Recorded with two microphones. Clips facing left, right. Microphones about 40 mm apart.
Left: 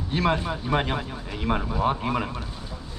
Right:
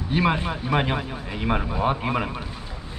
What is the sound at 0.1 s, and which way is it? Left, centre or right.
Speech, centre.